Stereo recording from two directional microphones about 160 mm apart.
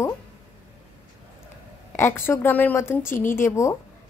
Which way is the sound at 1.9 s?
15° left (ahead or behind).